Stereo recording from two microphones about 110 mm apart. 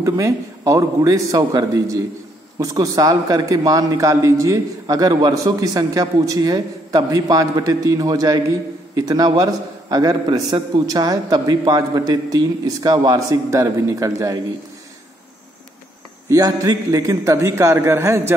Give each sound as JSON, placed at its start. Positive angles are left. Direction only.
{"t": 0.0, "sound": "a man's voice", "side_deg": -30}
{"t": 16.3, "sound": "a man's voice", "side_deg": -30}